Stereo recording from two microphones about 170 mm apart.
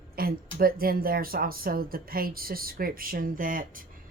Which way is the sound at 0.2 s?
60° right (ahead or behind).